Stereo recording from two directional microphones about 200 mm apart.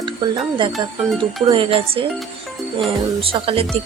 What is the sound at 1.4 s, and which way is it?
Speech, 25° right (ahead or behind).